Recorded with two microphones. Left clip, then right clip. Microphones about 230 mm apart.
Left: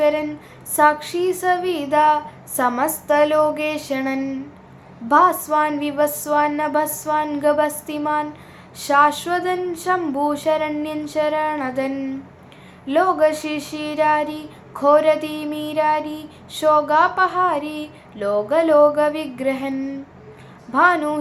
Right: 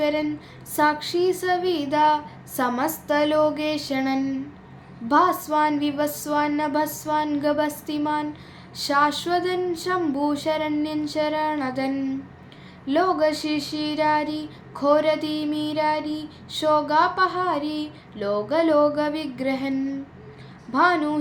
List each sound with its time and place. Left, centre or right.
0.0 s speech: centre
12.9 s speech: centre
20.7 s speech: centre